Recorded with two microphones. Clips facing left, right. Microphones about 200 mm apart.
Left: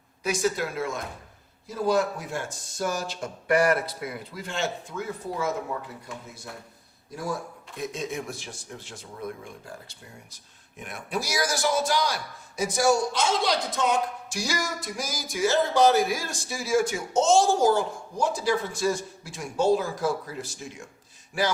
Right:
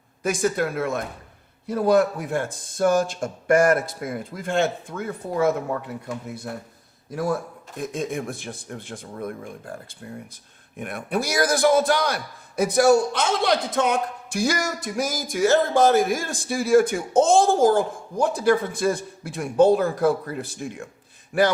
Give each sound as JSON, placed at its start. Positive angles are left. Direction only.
{"t": 0.2, "sound": "speech", "side_deg": -50}